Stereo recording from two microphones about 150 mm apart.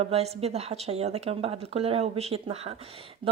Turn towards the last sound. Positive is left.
turn(degrees=-40)  # may be behind; listen again after turning